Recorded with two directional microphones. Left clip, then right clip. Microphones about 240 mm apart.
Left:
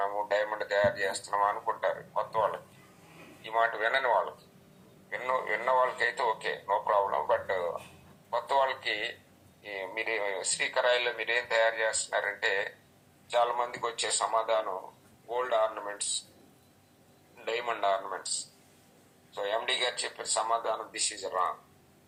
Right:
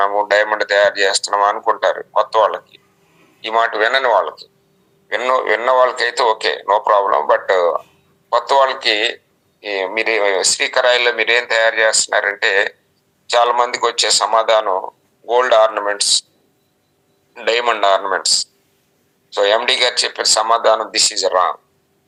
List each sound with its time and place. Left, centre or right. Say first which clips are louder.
0.0 s a man's voice: right 15 dB; right
17.3 s a man's voice: right 17 dB; right
19.3 s speech: right 17 dB; right